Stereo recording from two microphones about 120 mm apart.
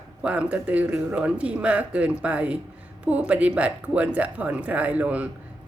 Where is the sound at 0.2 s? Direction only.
10° right (ahead or behind).